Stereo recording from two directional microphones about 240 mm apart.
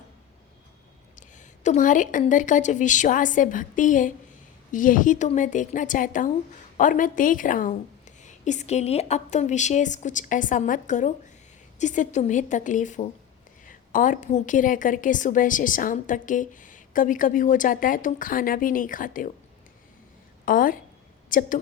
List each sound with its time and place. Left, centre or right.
1.6 s a woman's voice: left
20.4 s a woman's voice: left